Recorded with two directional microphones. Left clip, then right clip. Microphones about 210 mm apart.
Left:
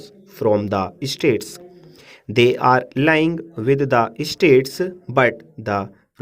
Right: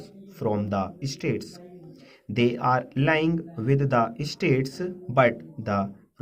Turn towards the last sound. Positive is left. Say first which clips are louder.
# left 5 dB
turn(degrees=45)  # may be behind; listen again after turning